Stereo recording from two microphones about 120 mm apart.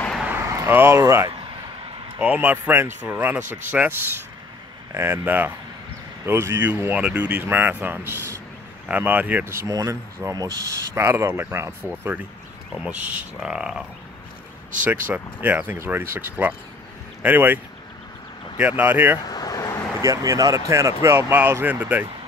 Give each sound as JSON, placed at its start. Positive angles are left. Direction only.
{"t": 0.2, "sound": "a sound", "side_deg": -15}
{"t": 0.5, "sound": "speech", "side_deg": -20}
{"t": 2.1, "sound": "speech", "side_deg": -15}
{"t": 4.9, "sound": "speech", "side_deg": -20}
{"t": 12.7, "sound": "speech", "side_deg": -10}
{"t": 14.9, "sound": "speech", "side_deg": -15}
{"t": 18.6, "sound": "speech", "side_deg": -15}
{"t": 19.2, "sound": "vehicle", "side_deg": 30}
{"t": 20.0, "sound": "speech", "side_deg": -25}